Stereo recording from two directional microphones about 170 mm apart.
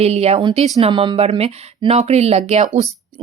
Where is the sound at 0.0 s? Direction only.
40° right (ahead or behind).